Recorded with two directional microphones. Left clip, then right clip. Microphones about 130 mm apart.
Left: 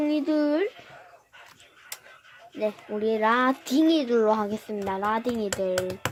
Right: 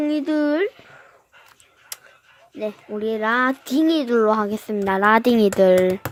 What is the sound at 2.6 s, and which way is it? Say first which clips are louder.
Speech: right 1 dB; 20° right (ahead or behind).